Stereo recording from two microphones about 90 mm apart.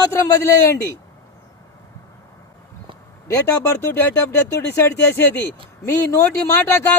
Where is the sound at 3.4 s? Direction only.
25° left (ahead or behind).